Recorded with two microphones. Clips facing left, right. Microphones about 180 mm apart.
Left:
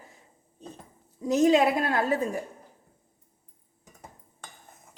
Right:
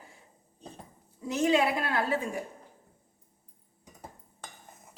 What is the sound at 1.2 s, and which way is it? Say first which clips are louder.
Speech: left 5 dB; 40° left (ahead or behind).